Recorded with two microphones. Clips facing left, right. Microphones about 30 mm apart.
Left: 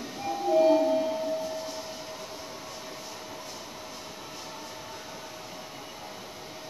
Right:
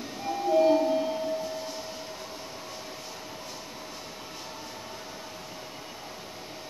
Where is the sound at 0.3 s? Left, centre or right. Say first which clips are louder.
Even; centre.